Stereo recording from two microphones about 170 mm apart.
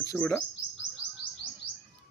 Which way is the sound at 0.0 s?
15° left (ahead or behind).